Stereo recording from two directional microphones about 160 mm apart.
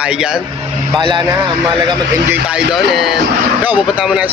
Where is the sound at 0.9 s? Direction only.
30° right (ahead or behind).